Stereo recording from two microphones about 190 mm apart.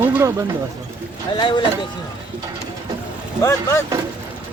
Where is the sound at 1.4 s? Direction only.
25° left (ahead or behind).